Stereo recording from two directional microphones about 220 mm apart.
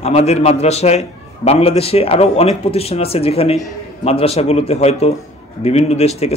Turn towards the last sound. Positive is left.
turn(degrees=30)  # may be behind; listen again after turning